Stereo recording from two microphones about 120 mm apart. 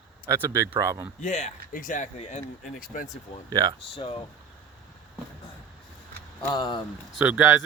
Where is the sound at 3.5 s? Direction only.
35° right (ahead or behind).